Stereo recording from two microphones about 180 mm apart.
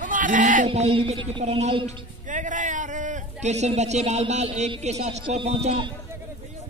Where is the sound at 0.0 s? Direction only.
45° right (ahead or behind).